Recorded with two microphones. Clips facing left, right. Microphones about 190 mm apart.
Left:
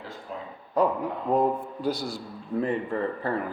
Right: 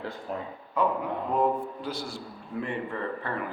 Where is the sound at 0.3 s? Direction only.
55° right (ahead or behind).